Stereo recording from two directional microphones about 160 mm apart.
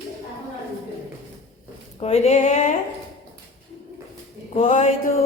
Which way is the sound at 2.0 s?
40° left (ahead or behind).